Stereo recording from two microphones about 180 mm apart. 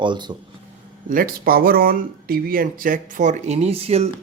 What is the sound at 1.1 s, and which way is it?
Speech, 50° right (ahead or behind).